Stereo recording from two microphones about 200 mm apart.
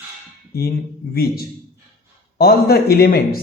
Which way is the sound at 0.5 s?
50° left (ahead or behind).